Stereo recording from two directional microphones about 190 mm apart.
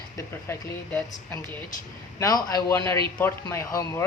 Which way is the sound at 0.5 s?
15° left (ahead or behind).